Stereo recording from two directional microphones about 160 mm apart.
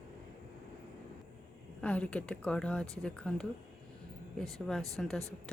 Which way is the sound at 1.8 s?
10° left (ahead or behind).